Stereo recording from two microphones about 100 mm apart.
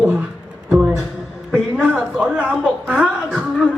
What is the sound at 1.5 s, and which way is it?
A man's voice, 15° right (ahead or behind).